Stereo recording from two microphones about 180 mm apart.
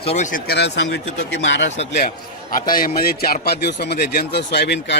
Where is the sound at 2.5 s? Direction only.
50° left (ahead or behind); by 5.0 s 80° left.